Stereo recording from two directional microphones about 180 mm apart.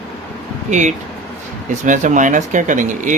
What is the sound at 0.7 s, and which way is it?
Speech, 40° right (ahead or behind).